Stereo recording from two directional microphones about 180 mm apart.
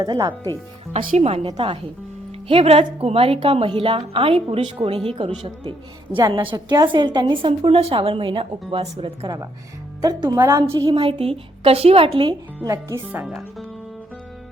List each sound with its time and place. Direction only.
0.0 s a woman's voice: 20° right (ahead or behind)
0.9 s a woman's voice: 40° right (ahead or behind)
12.5 s speech: 15° right (ahead or behind); by 13.7 s centre (ahead or behind)